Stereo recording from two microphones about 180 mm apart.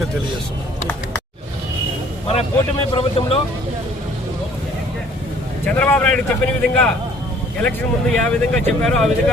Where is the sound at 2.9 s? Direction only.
30° left (ahead or behind).